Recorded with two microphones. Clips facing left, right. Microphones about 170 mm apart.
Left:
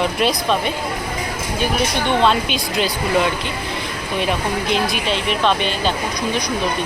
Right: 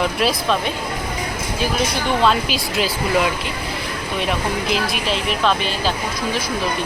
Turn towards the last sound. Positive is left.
turn(degrees=0)  # may be behind; listen again after turning